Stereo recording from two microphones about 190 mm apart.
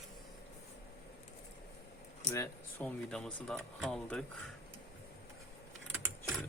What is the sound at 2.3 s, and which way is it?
Speech, 10° left (ahead or behind).